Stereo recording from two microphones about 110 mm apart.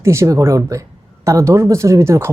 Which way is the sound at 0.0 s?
25° right (ahead or behind).